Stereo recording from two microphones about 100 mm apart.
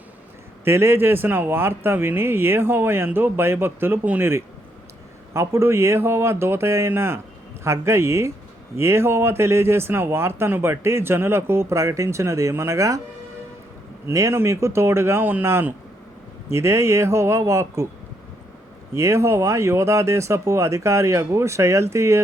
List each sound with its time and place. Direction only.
0.6 s speech: 25° right (ahead or behind)
5.3 s speech: 30° right (ahead or behind)
14.1 s speech: 30° right (ahead or behind)
18.9 s speech: 30° right (ahead or behind)